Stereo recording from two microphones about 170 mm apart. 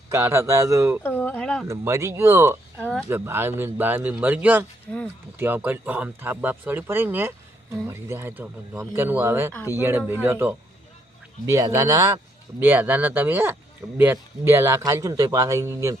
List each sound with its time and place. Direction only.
0.1 s speech: 15° right (ahead or behind)
1.0 s a sound: 10° left (ahead or behind)
1.6 s speech: 15° right (ahead or behind)
9.5 s speech: 15° left (ahead or behind)
9.7 s speech: 15° right (ahead or behind)